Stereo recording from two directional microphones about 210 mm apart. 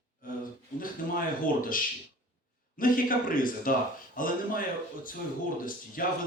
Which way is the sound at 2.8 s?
40° left (ahead or behind).